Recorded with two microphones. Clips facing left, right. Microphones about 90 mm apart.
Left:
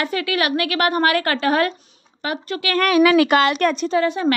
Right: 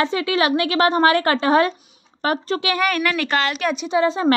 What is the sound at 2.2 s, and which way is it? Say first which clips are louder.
Speech: right 4 dB; 40° right (ahead or behind).